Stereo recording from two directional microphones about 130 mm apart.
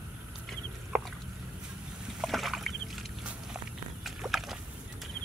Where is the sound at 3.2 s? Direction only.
5° right (ahead or behind).